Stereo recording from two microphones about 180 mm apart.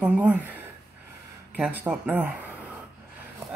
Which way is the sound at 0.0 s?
10° right (ahead or behind).